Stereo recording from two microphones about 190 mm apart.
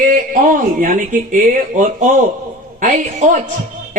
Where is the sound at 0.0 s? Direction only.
45° right (ahead or behind).